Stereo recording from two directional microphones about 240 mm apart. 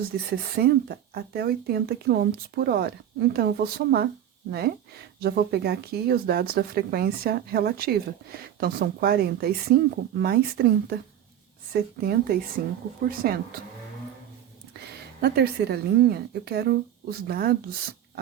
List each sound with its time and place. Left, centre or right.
0.1 s a woman's voice: right
5.2 s speech: right
14.7 s a woman's voice: right